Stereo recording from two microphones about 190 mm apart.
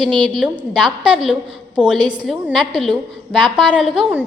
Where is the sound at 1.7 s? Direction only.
5° right (ahead or behind).